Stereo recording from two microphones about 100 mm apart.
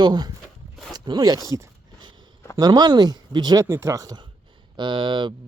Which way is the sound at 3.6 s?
30° right (ahead or behind).